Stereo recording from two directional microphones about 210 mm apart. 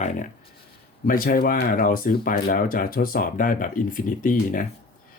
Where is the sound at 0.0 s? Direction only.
35° left (ahead or behind).